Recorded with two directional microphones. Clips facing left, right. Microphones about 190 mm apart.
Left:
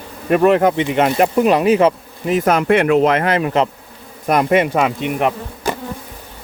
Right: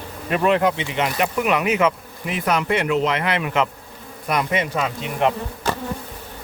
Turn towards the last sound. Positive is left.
turn(degrees=10)  # may be behind; listen again after turning